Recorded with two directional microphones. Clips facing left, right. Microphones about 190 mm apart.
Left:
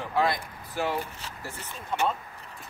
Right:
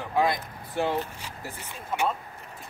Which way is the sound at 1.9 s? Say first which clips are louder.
Even; 5° right (ahead or behind).